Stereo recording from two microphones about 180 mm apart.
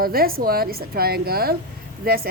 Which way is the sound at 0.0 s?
55° right (ahead or behind).